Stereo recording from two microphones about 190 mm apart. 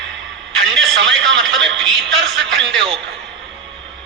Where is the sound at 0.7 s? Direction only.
Centre (ahead or behind).